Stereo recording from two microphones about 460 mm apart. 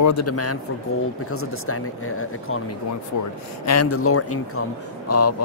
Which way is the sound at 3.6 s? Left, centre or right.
Left.